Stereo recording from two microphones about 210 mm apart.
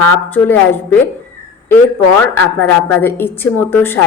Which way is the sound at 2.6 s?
10° left (ahead or behind).